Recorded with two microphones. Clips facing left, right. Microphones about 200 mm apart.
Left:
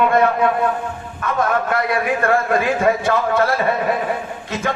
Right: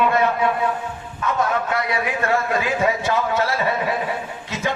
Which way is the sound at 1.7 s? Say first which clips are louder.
Left 4 dB; 55° left (ahead or behind).